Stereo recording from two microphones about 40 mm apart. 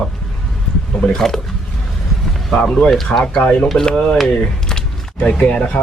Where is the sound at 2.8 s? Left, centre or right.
Centre.